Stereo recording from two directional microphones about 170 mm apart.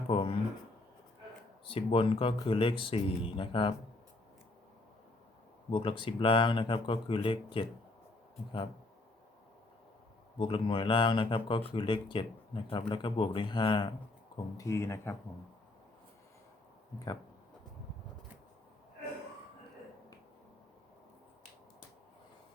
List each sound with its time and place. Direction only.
0.1 s a sound: 35° left (ahead or behind)
1.6 s speech: 30° left (ahead or behind)
5.7 s speech: 30° left (ahead or behind)
10.3 s speech: 30° left (ahead or behind)
14.6 s speech: 15° left (ahead or behind)